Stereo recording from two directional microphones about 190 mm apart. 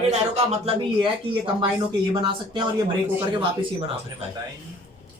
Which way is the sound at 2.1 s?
25° right (ahead or behind).